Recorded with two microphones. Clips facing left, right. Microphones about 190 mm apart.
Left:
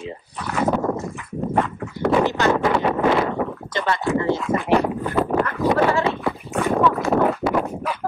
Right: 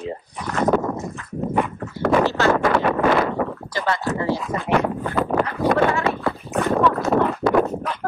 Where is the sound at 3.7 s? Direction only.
20° left (ahead or behind).